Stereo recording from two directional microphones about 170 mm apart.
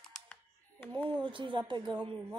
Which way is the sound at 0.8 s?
10° left (ahead or behind).